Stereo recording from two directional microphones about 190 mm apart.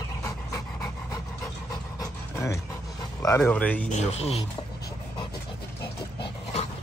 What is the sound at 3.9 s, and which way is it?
Speech, 35° left (ahead or behind).